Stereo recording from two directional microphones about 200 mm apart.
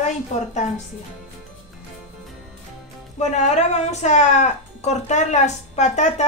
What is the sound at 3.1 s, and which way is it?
Speech, 35° left (ahead or behind).